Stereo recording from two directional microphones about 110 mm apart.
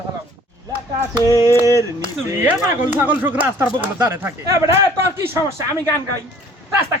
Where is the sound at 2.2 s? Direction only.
20° right (ahead or behind).